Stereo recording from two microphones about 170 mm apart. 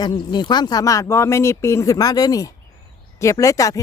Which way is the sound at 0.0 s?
25° left (ahead or behind).